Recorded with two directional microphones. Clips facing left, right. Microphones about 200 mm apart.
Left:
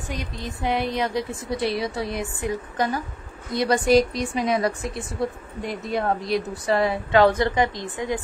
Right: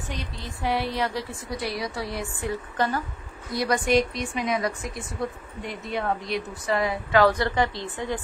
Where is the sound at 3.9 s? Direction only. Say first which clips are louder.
Left 6 dB; 35° left (ahead or behind); by 8.1 s 15° left (ahead or behind).